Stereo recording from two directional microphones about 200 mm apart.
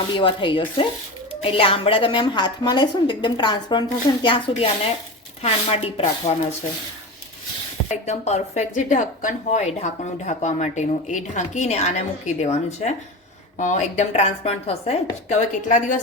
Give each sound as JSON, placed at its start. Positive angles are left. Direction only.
{"t": 0.1, "sound": "speech", "side_deg": 25}
{"t": 7.9, "sound": "speech", "side_deg": 35}